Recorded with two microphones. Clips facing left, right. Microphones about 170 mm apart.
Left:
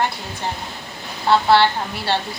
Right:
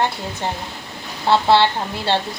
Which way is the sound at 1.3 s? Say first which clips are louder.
Even; 20° right (ahead or behind).